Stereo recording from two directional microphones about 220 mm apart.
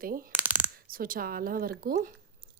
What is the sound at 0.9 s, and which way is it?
Speech, 40° right (ahead or behind).